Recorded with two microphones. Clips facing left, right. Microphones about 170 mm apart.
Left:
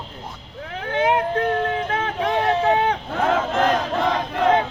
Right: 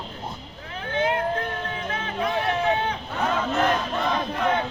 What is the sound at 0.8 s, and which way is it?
Speech, 75° left (ahead or behind).